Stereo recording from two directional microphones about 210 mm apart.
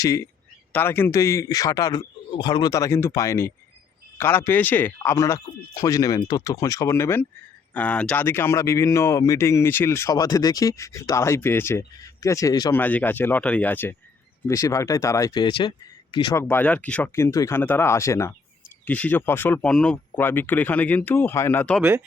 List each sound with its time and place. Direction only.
0.0 s speech: 15° left (ahead or behind)
21.8 s speech: 10° right (ahead or behind)